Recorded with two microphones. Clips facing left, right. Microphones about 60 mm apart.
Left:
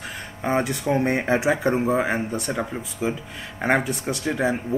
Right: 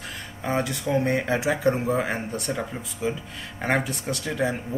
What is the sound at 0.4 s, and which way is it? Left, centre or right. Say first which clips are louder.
Speech: left 3 dB; left.